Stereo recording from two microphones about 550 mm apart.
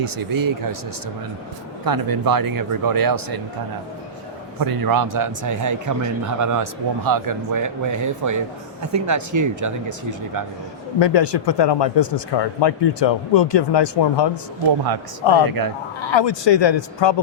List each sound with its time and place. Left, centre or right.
0.0 s speech: right
1.8 s speech: right
4.6 s speech: right
11.0 s speech: left
15.4 s speech: right
16.0 s speech: left